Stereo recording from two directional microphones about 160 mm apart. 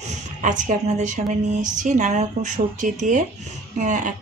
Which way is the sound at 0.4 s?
50° right (ahead or behind).